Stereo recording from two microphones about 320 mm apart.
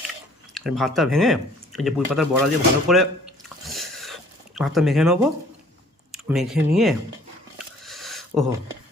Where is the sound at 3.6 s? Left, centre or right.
Centre.